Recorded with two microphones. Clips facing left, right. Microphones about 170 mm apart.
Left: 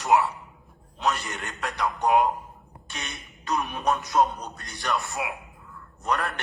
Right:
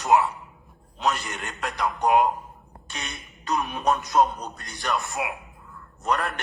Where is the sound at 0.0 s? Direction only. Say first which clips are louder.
Right 1 dB; 20° right (ahead or behind).